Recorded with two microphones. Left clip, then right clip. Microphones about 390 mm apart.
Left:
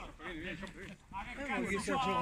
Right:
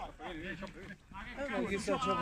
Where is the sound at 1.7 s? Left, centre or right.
Right.